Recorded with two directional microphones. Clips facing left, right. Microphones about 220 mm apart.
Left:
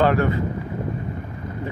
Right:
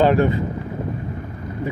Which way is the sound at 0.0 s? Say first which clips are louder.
Right 3 dB; 20° right (ahead or behind).